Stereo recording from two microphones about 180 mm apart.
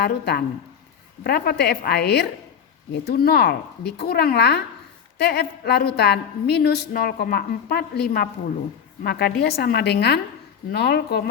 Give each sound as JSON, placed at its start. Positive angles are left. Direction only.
{"t": 0.0, "sound": "a woman's voice", "side_deg": 65}